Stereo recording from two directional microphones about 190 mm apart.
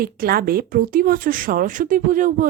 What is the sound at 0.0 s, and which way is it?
Speech, 50° right (ahead or behind).